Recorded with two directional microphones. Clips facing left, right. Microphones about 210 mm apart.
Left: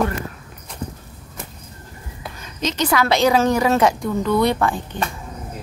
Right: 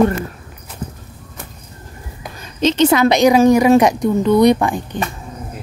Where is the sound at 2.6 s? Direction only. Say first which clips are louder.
Right 7 dB; 30° right (ahead or behind).